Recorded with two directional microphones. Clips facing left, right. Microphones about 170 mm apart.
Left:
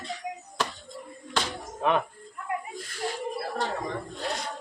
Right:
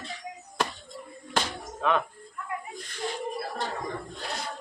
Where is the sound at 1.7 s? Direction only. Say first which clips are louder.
Left 1 dB; 20° left (ahead or behind).